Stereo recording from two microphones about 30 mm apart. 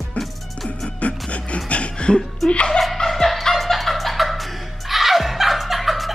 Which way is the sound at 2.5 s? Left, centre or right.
Left.